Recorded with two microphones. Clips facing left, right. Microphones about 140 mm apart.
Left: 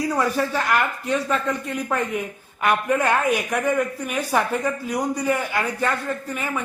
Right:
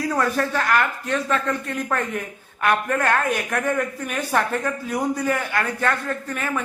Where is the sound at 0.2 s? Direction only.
10° left (ahead or behind).